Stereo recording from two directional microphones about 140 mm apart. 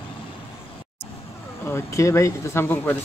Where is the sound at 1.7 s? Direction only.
20° left (ahead or behind).